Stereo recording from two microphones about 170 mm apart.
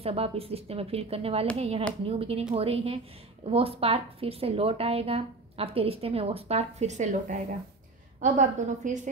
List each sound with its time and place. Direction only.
0.0 s a woman's voice: 35° right (ahead or behind)